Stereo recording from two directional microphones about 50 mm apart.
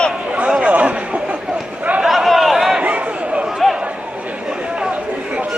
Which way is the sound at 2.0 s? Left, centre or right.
Centre.